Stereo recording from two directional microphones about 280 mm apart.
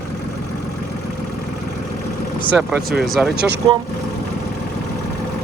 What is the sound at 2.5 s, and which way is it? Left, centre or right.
Speech, centre.